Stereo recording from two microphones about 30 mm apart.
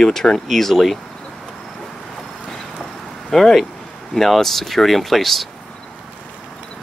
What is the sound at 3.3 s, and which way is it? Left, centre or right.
Speech, centre.